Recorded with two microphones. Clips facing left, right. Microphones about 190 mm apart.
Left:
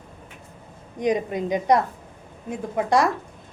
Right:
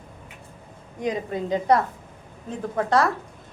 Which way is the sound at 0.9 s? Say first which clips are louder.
Left 4 dB; 20° left (ahead or behind).